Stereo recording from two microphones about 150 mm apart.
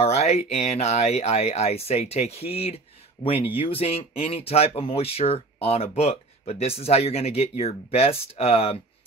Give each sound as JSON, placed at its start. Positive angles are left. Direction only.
{"t": 0.0, "sound": "speech", "side_deg": 45}